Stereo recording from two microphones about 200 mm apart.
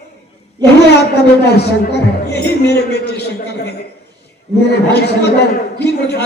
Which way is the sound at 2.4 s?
55° left (ahead or behind).